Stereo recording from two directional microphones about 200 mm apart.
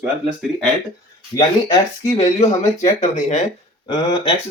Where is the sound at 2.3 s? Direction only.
35° left (ahead or behind).